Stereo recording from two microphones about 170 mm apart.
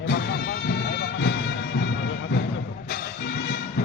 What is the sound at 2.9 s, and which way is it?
Music, 70° left (ahead or behind).